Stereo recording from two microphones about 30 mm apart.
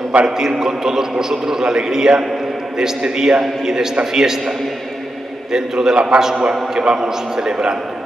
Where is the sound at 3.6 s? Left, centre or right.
Centre.